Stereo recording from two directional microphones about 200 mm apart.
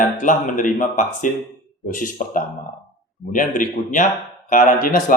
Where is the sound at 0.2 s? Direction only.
40° left (ahead or behind).